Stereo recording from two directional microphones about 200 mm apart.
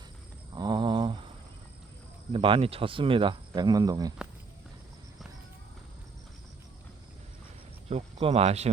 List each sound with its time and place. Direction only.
0.5 s a sound: 20° right (ahead or behind)
2.3 s speech: 25° right (ahead or behind)
7.9 s speech: 30° right (ahead or behind)